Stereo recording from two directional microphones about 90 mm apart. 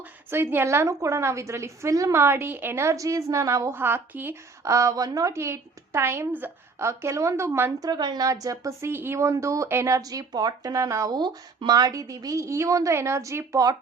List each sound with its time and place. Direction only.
0.3 s a woman's voice: 25° right (ahead or behind)
4.6 s a woman's voice: 35° right (ahead or behind)
7.8 s a woman's voice: 50° right (ahead or behind)